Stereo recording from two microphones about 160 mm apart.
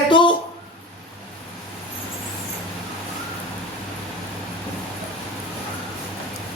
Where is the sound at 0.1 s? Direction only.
30° left (ahead or behind).